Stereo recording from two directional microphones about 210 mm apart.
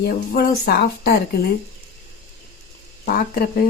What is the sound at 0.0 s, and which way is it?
Speech, 45° left (ahead or behind).